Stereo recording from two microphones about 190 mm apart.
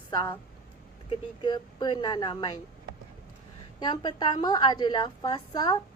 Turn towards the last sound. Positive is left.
turn(degrees=20)  # may be behind; listen again after turning